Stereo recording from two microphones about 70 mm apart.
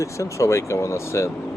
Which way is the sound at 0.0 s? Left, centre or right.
Left.